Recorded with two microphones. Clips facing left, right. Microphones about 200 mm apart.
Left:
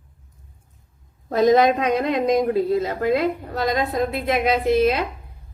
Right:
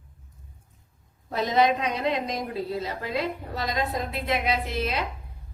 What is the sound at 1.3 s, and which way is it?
Speech, 45° left (ahead or behind).